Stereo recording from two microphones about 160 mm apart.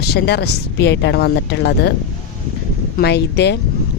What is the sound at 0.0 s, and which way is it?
Speech, 90° left.